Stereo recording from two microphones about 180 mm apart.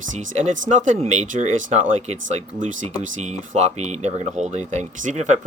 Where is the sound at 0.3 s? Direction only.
40° right (ahead or behind).